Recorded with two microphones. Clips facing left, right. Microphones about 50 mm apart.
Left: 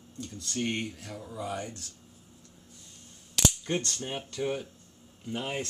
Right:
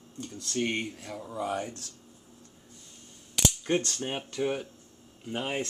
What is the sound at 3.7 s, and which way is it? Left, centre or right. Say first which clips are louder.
Speech: right 3 dB; centre.